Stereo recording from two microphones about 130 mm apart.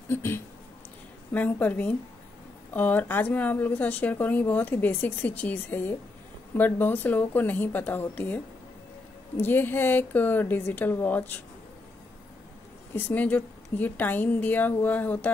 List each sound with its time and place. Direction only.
0.1 s speech: 20° left (ahead or behind)
9.4 s speech: 15° left (ahead or behind)
12.9 s speech: 15° left (ahead or behind)